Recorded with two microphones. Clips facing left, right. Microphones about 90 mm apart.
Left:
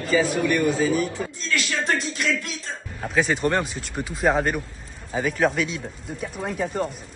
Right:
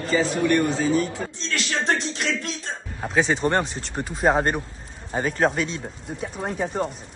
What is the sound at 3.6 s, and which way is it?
Speech, 35° right (ahead or behind).